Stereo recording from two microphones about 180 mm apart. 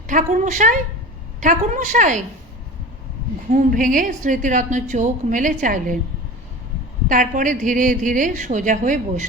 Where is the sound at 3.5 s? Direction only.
45° right (ahead or behind).